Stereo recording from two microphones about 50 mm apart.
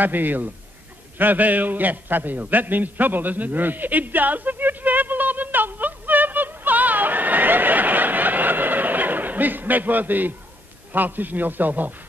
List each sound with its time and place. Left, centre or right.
0.0 s a man's voice: right
1.1 s a sound: right
10.9 s a man's voice: right